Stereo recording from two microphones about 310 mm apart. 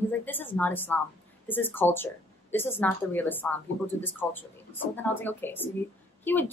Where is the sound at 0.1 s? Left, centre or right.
Centre.